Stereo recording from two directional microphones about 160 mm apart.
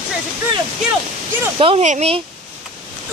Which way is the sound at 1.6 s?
35° right (ahead or behind).